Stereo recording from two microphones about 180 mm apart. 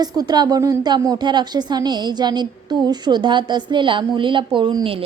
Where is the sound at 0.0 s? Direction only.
20° right (ahead or behind).